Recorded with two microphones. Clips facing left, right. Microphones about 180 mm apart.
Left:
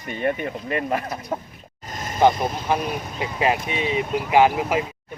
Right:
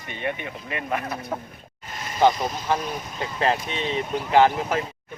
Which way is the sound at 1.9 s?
45° left (ahead or behind).